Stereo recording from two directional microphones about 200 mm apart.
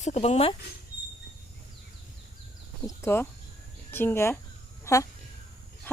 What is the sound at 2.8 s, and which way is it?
A woman's voice, 10° left (ahead or behind).